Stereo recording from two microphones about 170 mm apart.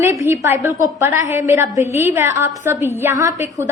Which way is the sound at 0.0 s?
15° right (ahead or behind).